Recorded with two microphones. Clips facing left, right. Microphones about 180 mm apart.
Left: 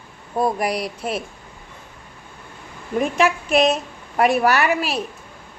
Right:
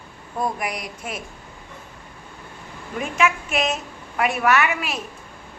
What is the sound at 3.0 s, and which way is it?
A woman's voice, 35° left (ahead or behind).